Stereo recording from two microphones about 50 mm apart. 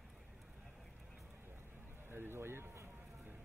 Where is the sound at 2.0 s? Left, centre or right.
Right.